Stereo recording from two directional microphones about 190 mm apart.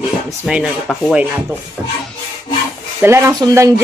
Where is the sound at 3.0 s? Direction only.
15° right (ahead or behind).